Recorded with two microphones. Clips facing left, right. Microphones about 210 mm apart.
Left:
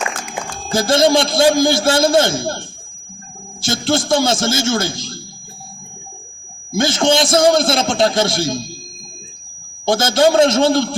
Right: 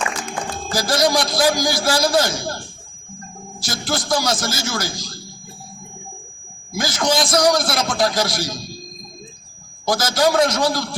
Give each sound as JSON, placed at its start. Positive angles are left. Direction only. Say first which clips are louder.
{"t": 0.7, "sound": "a man's voice", "louder": "left 6 dB", "side_deg": 25}
{"t": 6.7, "sound": "a man's voice", "louder": "left 5 dB", "side_deg": 25}
{"t": 9.8, "sound": "a man's voice", "louder": "left 5 dB", "side_deg": 25}